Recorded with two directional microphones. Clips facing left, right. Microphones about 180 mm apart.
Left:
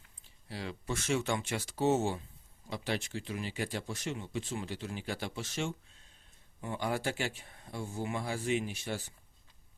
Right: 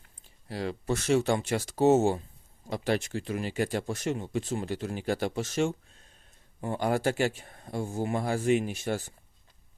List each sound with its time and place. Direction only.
0.4 s speech: 45° right (ahead or behind)